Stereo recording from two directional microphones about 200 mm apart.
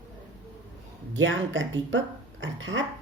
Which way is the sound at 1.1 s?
70° right (ahead or behind).